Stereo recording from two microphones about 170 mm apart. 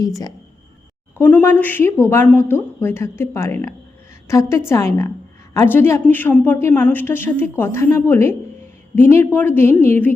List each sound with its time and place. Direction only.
1.2 s a woman's voice: 10° left (ahead or behind)